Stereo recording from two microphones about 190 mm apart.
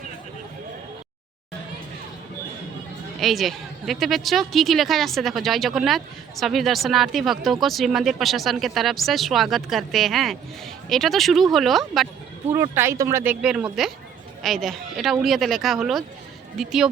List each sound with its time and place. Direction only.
3.2 s speech: centre (ahead or behind)
12.5 s speech: 15° right (ahead or behind)
13.4 s speech: 5° right (ahead or behind)